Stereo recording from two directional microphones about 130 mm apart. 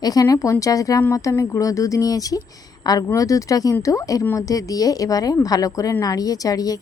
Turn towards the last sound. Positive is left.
turn(degrees=30)  # may be behind; listen again after turning